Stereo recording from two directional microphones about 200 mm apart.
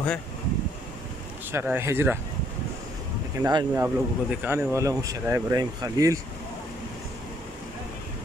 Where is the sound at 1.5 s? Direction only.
10° right (ahead or behind).